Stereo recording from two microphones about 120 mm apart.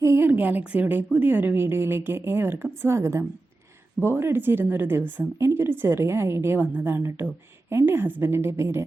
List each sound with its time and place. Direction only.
0.0 s a woman's voice: 20° right (ahead or behind)